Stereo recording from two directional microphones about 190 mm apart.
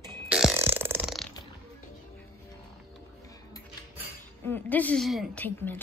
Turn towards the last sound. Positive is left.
turn(degrees=10)  # may be behind; listen again after turning